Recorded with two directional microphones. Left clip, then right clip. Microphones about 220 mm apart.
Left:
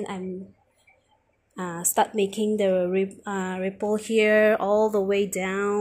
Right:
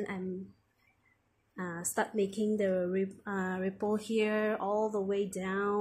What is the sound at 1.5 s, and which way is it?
A woman's voice, 15° left (ahead or behind).